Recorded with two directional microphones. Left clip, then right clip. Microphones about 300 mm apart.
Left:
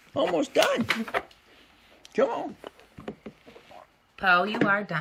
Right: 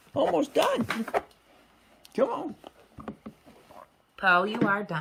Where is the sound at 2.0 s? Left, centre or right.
Centre.